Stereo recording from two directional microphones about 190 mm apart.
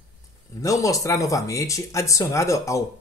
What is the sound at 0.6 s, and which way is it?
Speech, 15° left (ahead or behind).